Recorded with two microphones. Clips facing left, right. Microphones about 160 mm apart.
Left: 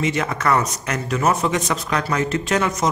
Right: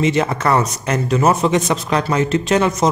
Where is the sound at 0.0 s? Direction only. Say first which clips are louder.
Right 5 dB; 25° right (ahead or behind).